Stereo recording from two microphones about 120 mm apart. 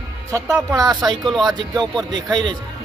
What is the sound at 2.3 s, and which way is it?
Speech, 35° right (ahead or behind).